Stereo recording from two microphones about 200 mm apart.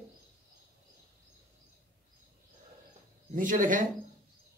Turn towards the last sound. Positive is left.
turn(degrees=-40)  # may be behind; listen again after turning